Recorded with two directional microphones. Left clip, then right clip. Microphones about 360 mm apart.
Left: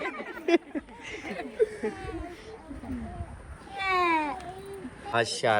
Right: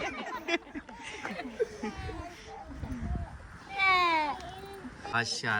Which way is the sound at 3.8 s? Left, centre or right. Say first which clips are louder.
Even; right.